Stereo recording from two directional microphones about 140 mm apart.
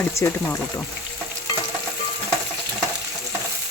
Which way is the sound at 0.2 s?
20° left (ahead or behind).